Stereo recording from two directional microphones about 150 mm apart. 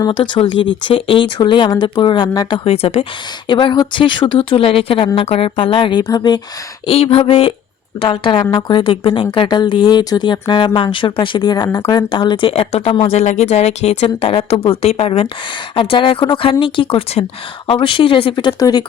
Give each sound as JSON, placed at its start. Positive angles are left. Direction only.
{"t": 0.0, "sound": "speech", "side_deg": 30}
{"t": 2.6, "sound": "speech", "side_deg": 40}
{"t": 6.8, "sound": "speech", "side_deg": 40}